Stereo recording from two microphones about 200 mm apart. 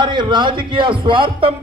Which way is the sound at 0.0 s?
25° right (ahead or behind).